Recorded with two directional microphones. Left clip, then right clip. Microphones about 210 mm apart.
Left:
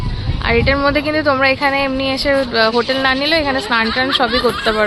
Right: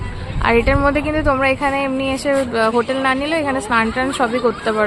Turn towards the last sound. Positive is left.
turn(degrees=-5)  # may be behind; listen again after turning